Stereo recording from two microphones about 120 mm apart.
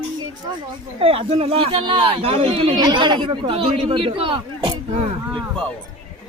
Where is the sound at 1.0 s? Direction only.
50° right (ahead or behind).